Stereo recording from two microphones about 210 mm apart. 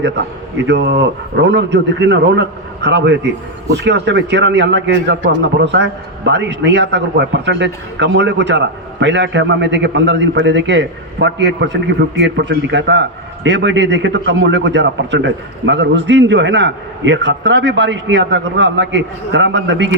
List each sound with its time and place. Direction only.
0.7 s a man's voice: 55° right (ahead or behind)